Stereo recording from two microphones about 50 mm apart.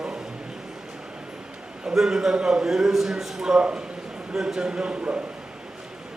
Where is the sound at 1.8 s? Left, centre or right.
Centre.